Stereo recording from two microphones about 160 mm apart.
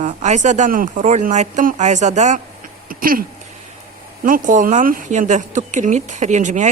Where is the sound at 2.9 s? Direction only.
65° right (ahead or behind).